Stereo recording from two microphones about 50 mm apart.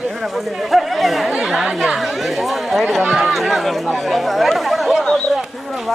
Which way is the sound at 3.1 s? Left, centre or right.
Centre.